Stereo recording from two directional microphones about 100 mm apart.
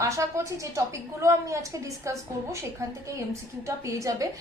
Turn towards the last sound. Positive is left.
turn(degrees=-35)  # may be behind; listen again after turning